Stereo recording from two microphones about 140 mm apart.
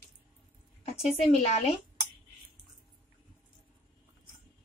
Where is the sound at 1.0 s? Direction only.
45° left (ahead or behind).